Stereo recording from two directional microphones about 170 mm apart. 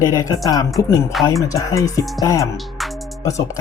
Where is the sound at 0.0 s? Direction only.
20° left (ahead or behind).